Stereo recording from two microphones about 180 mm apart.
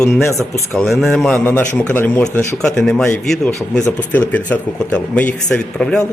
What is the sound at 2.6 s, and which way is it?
Speech, 5° left (ahead or behind).